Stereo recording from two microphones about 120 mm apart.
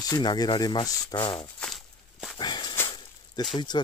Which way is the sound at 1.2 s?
45° left (ahead or behind).